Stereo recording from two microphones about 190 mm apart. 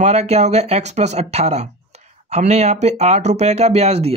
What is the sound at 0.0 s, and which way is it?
A man's voice, 35° right (ahead or behind).